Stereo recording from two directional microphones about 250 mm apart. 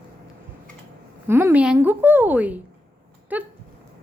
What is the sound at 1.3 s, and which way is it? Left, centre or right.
A woman's voice, centre.